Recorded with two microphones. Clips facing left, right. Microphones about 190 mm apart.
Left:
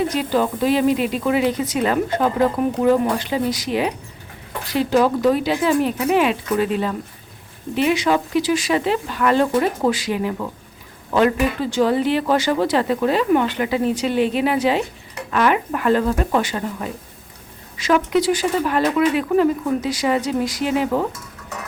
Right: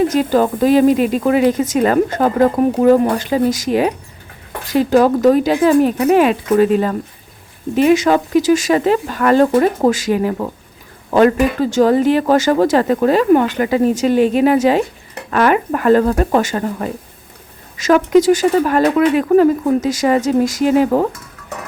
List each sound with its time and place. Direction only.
0.1 s speech: 45° right (ahead or behind)
18.8 s speech: 60° right (ahead or behind)
19.1 s speech: 45° right (ahead or behind)